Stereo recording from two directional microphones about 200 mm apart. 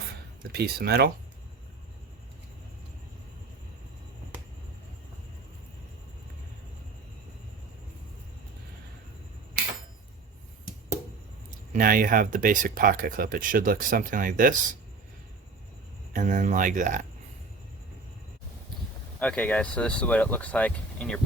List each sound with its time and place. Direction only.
0.5 s speech: 50° right (ahead or behind)
11.7 s speech: 45° right (ahead or behind)
16.1 s speech: 40° right (ahead or behind)
19.2 s speech: 5° left (ahead or behind)